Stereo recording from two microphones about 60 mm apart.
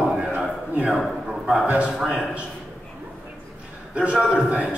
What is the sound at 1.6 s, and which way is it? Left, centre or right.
Speech, right.